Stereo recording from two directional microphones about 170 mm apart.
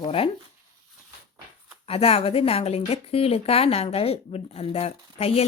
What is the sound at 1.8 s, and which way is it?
A woman's voice, 35° left (ahead or behind).